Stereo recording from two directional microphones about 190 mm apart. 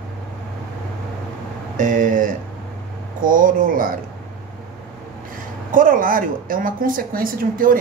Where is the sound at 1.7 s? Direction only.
40° right (ahead or behind).